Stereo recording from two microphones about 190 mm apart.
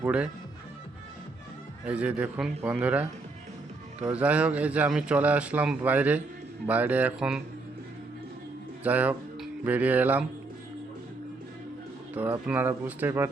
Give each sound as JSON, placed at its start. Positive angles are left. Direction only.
{"t": 0.0, "sound": "a man's voice", "side_deg": -5}
{"t": 1.9, "sound": "a man's voice", "side_deg": -5}
{"t": 4.1, "sound": "a man's voice", "side_deg": -5}
{"t": 8.8, "sound": "speech", "side_deg": -10}
{"t": 12.1, "sound": "a man's voice", "side_deg": -10}